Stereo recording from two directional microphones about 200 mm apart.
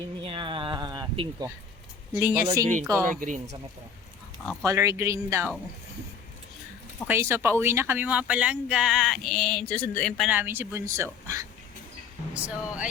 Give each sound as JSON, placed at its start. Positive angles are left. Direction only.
{"t": 0.3, "sound": "a sound", "side_deg": -25}
{"t": 2.1, "sound": "speech", "side_deg": -10}
{"t": 3.1, "sound": "speech", "side_deg": -40}
{"t": 4.6, "sound": "speech", "side_deg": -15}
{"t": 7.1, "sound": "speech", "side_deg": -10}
{"t": 10.2, "sound": "speech", "side_deg": -10}